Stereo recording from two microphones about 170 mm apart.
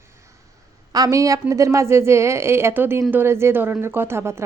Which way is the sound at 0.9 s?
20° right (ahead or behind).